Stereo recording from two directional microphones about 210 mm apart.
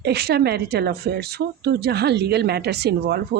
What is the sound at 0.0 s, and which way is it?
Speech, 50° right (ahead or behind).